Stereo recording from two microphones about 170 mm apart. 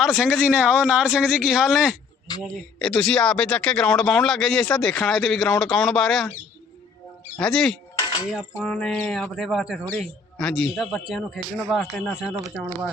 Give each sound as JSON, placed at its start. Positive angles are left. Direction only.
{"t": 0.0, "sound": "a man's voice", "side_deg": -5}
{"t": 2.3, "sound": "a man's voice", "side_deg": 25}
{"t": 2.7, "sound": "a man's voice", "side_deg": 5}
{"t": 7.3, "sound": "a man's voice", "side_deg": 5}
{"t": 7.9, "sound": "a sound", "side_deg": 25}
{"t": 8.3, "sound": "a man's voice", "side_deg": 0}